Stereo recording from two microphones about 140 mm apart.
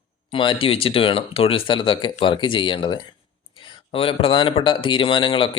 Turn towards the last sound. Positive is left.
turn(degrees=35)  # may be behind; listen again after turning